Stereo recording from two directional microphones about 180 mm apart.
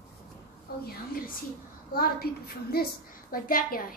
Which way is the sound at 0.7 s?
60° left (ahead or behind).